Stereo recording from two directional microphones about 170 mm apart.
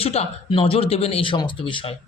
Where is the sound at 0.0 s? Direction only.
35° left (ahead or behind).